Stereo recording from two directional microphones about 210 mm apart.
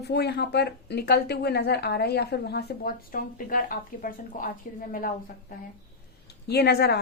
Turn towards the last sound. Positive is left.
turn(degrees=50)  # may be behind; listen again after turning